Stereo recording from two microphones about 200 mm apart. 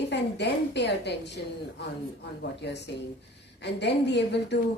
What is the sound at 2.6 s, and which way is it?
A woman's voice, 60° left (ahead or behind).